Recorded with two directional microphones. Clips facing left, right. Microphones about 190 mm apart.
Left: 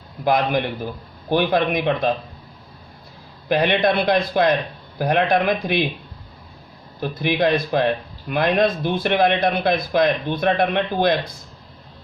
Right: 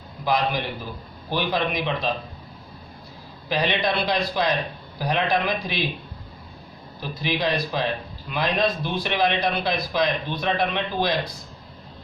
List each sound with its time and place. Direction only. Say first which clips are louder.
0.3 s a man's voice: left 4 dB; 55° left (ahead or behind)
3.5 s a man's voice: left 6 dB; 55° left (ahead or behind)
7.0 s a man's voice: left 6 dB; 55° left (ahead or behind)